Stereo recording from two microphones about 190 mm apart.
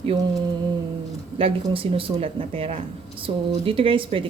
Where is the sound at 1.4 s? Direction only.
30° right (ahead or behind).